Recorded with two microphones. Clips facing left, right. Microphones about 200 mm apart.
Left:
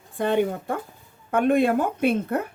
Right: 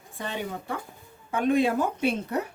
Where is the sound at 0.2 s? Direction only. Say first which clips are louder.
Left 11 dB; 55° left (ahead or behind).